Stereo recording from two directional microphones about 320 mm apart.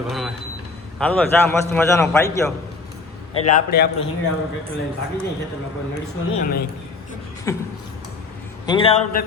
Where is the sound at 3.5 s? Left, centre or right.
Left.